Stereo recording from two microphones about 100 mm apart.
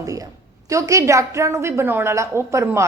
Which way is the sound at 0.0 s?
35° right (ahead or behind).